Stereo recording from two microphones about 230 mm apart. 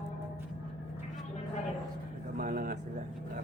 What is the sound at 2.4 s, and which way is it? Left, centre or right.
Vehicle, right.